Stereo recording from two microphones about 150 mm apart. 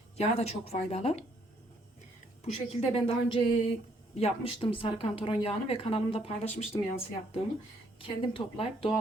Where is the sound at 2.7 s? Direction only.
40° left (ahead or behind).